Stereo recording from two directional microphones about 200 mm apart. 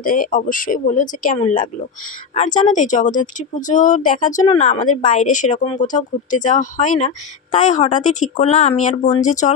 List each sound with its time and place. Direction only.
0.0 s speech: 45° left (ahead or behind)